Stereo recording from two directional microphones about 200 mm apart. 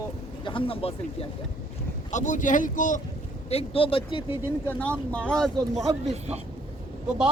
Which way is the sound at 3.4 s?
30° left (ahead or behind).